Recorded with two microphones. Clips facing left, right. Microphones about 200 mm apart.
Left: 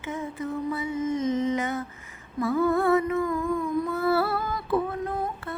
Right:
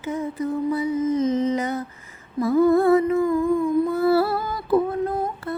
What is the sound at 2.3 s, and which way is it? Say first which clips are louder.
Humming: right 6 dB; 35° right (ahead or behind).